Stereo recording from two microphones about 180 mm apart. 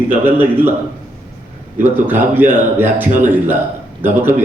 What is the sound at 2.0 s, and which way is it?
A man's voice, 10° right (ahead or behind).